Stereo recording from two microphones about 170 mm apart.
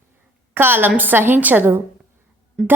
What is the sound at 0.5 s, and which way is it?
A woman's voice, 10° right (ahead or behind).